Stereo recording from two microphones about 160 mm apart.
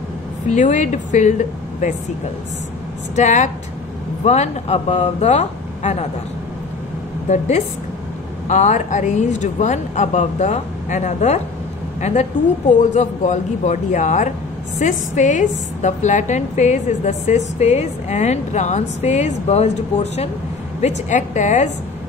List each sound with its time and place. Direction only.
0.5 s a woman's voice: 50° left (ahead or behind)
3.2 s a woman's voice: 50° left (ahead or behind)
7.2 s a woman's voice: 45° left (ahead or behind)